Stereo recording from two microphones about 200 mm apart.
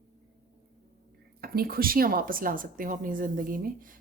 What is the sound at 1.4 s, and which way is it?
A woman's voice, 50° right (ahead or behind).